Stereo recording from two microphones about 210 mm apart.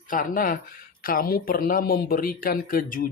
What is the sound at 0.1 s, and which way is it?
Speech, 40° left (ahead or behind).